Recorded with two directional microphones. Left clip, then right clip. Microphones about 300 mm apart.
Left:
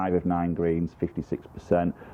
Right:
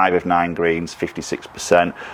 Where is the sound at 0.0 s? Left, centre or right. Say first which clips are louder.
Right 10 dB; centre.